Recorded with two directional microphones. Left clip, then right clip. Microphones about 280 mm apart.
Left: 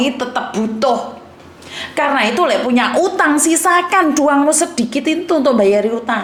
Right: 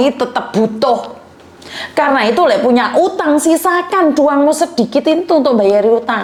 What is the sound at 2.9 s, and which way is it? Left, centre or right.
A woman's voice, centre.